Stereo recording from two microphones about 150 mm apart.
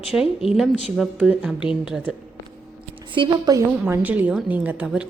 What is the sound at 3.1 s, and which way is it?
Speech, 35° right (ahead or behind).